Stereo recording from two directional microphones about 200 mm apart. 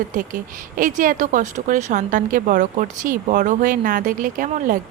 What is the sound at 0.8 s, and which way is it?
Speech, 40° right (ahead or behind).